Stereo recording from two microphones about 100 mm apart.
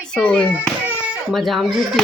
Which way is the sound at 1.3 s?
Centre (ahead or behind).